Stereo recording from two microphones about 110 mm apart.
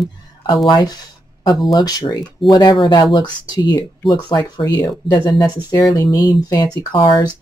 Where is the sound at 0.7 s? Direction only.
40° left (ahead or behind).